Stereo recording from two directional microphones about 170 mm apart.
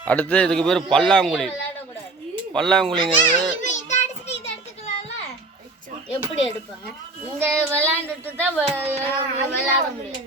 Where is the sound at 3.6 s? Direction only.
45° left (ahead or behind).